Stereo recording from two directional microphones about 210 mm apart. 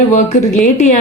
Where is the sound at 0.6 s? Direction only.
35° left (ahead or behind).